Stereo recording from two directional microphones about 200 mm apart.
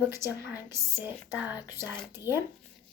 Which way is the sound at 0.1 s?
15° right (ahead or behind).